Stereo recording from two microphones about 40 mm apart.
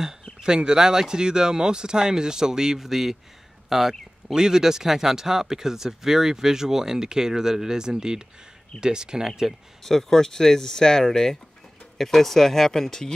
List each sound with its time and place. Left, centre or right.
0.4 s speech: centre
9.8 s speech: centre